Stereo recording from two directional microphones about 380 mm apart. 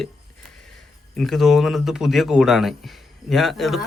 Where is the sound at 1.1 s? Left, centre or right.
Centre.